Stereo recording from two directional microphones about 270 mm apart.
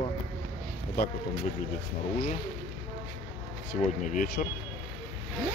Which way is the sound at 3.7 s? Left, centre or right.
Left.